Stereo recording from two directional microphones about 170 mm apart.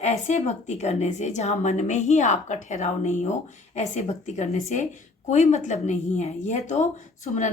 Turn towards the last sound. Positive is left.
turn(degrees=45)  # may be behind; listen again after turning